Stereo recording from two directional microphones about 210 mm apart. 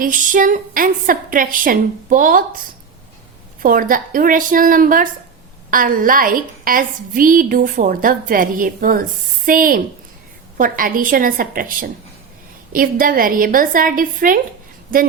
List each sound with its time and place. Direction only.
0.0 s a woman's voice: 40° right (ahead or behind)
3.6 s a woman's voice: 40° right (ahead or behind)